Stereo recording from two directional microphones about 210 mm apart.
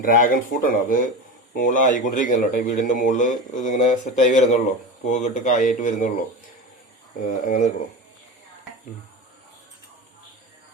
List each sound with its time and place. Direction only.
0.0 s a man's voice: 45° left (ahead or behind)
7.4 s a man's voice: 35° left (ahead or behind)